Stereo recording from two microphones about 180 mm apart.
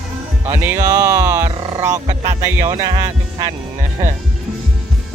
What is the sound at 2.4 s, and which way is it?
Speech, 15° right (ahead or behind).